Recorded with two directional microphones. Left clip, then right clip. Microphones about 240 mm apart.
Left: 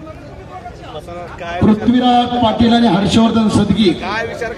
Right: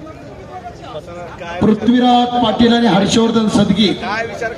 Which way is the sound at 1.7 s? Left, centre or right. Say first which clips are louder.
Right 1 dB; right.